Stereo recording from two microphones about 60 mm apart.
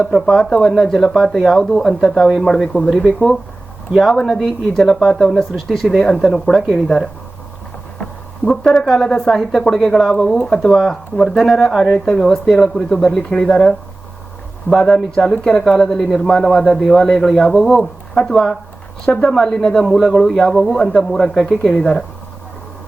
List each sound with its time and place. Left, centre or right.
0.1 s a woman's voice: centre
2.1 s a woman's voice: centre
8.4 s a woman's voice: centre
14.8 s a woman's voice: centre
21.7 s speech: left